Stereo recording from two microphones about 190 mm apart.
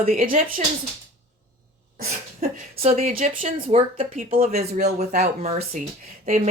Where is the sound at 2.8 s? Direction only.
40° right (ahead or behind).